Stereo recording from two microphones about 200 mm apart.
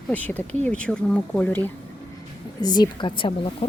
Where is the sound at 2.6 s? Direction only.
20° left (ahead or behind).